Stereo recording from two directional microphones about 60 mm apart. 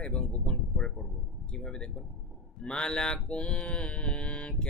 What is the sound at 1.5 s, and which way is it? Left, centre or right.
Speech, centre.